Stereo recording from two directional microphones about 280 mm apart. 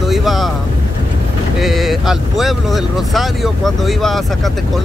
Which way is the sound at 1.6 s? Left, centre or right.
Centre.